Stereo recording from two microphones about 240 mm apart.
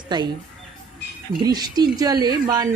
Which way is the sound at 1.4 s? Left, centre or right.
Centre.